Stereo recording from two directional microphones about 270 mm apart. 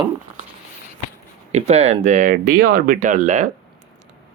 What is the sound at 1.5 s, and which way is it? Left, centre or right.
Speech, right.